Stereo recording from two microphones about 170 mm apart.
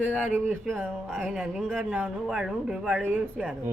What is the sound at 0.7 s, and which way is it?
Speech, centre (ahead or behind).